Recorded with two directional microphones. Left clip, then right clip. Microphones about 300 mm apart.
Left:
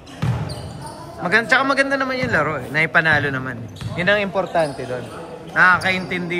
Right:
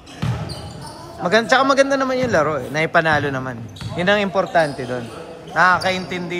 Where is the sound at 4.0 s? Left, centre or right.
Right.